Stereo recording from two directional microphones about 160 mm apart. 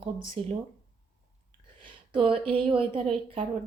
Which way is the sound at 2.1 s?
35° right (ahead or behind).